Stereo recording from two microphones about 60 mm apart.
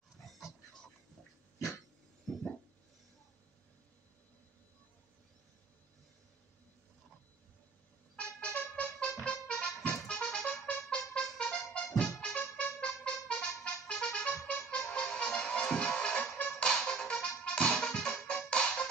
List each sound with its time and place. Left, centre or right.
8.2 s music: centre